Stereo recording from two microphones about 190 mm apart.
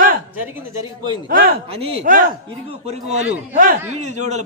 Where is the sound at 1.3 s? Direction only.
50° right (ahead or behind).